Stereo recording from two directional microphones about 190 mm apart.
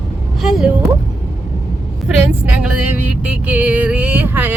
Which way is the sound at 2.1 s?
5° right (ahead or behind).